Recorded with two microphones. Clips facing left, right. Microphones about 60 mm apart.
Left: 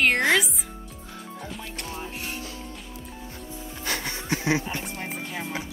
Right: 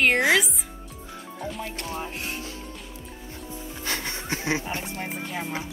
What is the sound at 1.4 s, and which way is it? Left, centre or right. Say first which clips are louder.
Music: right 6 dB; centre.